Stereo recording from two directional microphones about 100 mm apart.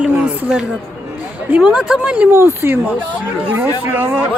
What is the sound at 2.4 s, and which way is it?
Speech, 25° right (ahead or behind).